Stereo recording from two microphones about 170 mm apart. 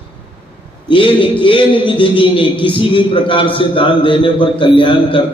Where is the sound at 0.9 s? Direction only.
30° left (ahead or behind).